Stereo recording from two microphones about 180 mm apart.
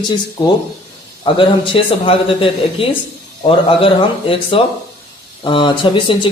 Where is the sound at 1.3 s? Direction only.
30° left (ahead or behind).